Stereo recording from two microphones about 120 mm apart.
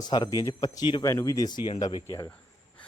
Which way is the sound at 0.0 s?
35° left (ahead or behind).